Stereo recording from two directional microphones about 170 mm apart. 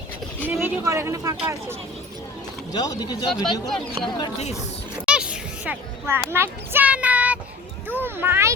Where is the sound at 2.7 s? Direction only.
25° left (ahead or behind).